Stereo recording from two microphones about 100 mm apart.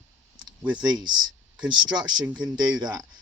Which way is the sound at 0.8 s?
45° right (ahead or behind).